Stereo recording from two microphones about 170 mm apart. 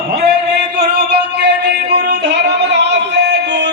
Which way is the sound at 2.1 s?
90° right.